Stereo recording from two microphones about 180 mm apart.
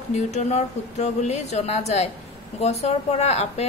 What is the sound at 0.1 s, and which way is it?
Speech, 40° left (ahead or behind).